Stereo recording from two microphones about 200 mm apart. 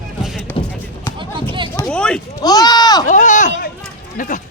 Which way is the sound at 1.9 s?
5° left (ahead or behind).